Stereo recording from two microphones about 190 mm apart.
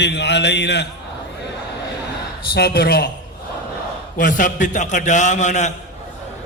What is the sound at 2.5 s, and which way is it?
Speech, 55° left (ahead or behind).